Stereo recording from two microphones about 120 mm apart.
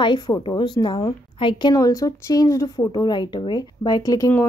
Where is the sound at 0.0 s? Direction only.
40° left (ahead or behind).